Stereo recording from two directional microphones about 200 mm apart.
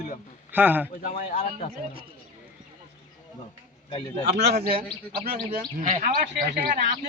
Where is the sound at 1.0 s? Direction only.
40° left (ahead or behind).